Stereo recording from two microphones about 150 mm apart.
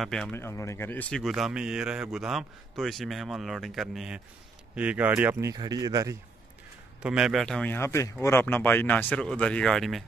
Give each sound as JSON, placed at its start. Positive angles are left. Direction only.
{"t": 0.0, "sound": "a man's voice", "side_deg": 5}
{"t": 0.4, "sound": "speech", "side_deg": 20}
{"t": 1.2, "sound": "a man's voice", "side_deg": 0}
{"t": 7.0, "sound": "speech", "side_deg": -5}